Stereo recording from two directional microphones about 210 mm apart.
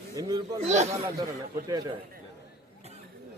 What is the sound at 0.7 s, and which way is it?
Speech, 30° right (ahead or behind).